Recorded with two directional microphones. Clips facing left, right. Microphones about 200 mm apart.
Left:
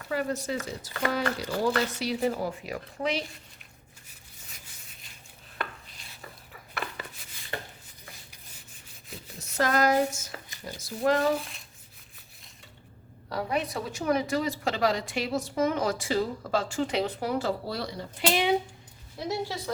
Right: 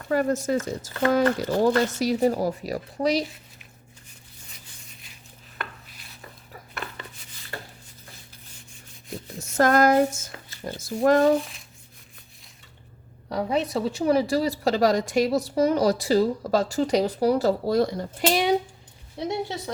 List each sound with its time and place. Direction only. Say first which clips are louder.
0.1 s speech: right 7 dB; 45° right (ahead or behind)
9.4 s a sound: right 6 dB; 50° right (ahead or behind)
10.6 s speech: right 6 dB; 50° right (ahead or behind)
13.2 s a woman's voice: right 5 dB; 25° right (ahead or behind); by 18.5 s 45° right (ahead or behind)
19.3 s a woman's voice: right 1 dB; 20° right (ahead or behind)